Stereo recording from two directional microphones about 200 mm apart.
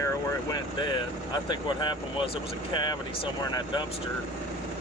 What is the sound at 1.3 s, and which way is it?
Speech, 20° left (ahead or behind).